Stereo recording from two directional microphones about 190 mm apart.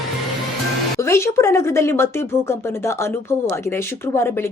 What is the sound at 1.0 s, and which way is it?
Speech, 15° left (ahead or behind).